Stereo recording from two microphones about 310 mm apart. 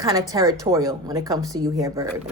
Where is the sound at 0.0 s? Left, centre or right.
Centre.